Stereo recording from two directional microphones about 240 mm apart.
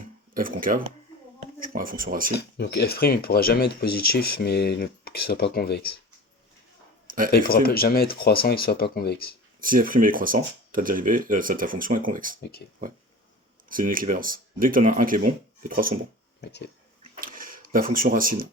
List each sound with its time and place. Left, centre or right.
0.3 s speech: right
2.3 s speech: left
7.3 s speech: left
9.6 s speech: right
12.4 s speech: left
13.7 s speech: right
16.4 s speech: left
17.2 s cash register: right